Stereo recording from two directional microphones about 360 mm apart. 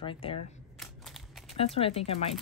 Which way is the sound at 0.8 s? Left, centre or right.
Centre.